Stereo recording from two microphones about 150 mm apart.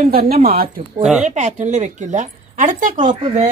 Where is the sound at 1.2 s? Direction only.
50° right (ahead or behind).